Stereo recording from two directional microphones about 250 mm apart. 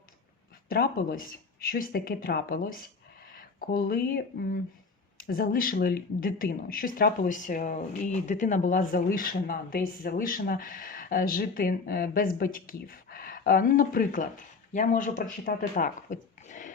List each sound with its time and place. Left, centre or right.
0.7 s speech: left